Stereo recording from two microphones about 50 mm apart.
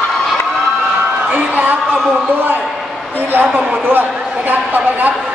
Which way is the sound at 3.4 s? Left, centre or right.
Right.